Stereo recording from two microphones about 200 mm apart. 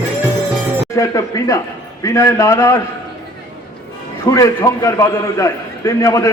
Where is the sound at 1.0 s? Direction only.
15° left (ahead or behind).